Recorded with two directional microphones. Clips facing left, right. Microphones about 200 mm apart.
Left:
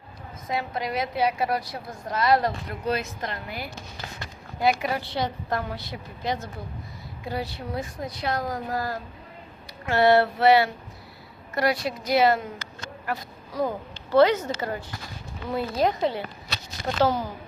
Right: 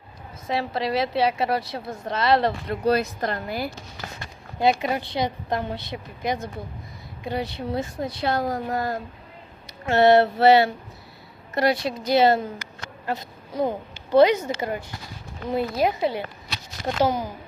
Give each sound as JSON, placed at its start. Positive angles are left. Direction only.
{"t": 0.4, "sound": "a woman's voice", "side_deg": -30}
{"t": 4.6, "sound": "a woman's voice", "side_deg": -25}